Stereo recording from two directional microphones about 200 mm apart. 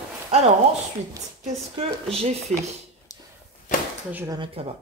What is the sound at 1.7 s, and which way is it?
Speech, 30° right (ahead or behind).